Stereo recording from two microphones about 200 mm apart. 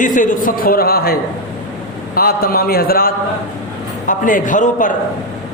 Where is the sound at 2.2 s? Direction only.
50° left (ahead or behind).